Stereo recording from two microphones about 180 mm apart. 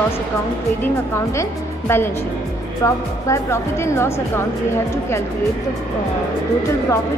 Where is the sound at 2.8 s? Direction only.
15° left (ahead or behind).